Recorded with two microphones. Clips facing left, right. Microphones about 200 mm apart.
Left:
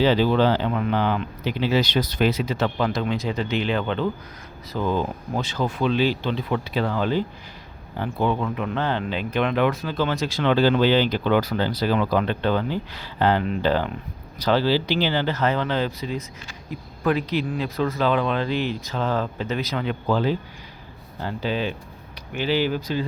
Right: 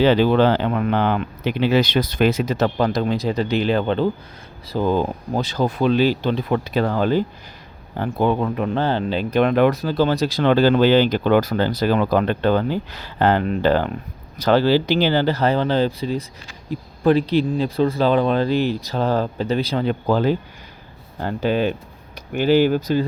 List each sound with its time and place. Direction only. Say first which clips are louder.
0.0 s speech: right 4 dB; 60° right (ahead or behind); by 20.3 s 40° right (ahead or behind)
21.2 s speech: right 6 dB; 50° right (ahead or behind)